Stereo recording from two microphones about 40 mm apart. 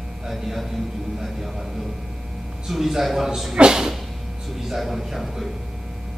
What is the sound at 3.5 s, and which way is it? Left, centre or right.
Speech, right.